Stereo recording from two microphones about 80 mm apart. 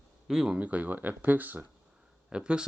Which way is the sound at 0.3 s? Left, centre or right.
Centre.